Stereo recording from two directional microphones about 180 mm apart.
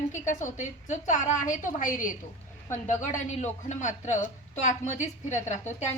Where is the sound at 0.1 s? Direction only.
40° left (ahead or behind).